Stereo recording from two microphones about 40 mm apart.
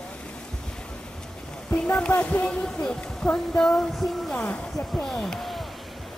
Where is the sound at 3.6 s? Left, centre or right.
Centre.